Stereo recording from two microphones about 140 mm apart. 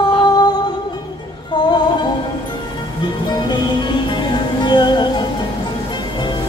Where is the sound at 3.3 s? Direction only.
35° left (ahead or behind).